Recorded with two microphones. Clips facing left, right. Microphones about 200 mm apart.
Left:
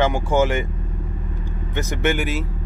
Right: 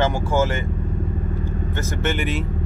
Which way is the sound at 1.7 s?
10° left (ahead or behind).